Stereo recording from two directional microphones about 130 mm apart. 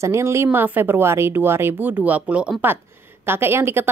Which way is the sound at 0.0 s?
20° right (ahead or behind).